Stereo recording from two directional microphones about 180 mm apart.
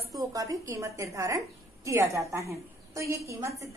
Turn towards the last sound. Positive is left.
turn(degrees=-15)  # may be behind; listen again after turning